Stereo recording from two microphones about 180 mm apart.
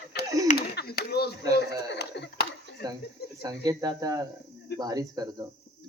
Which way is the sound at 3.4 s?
20° right (ahead or behind).